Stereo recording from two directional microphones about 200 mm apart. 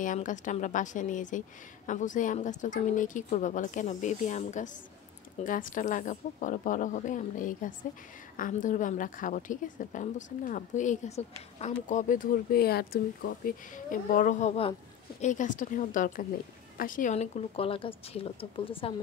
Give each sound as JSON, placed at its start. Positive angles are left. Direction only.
{"t": 0.0, "sound": "a woman's voice", "side_deg": 40}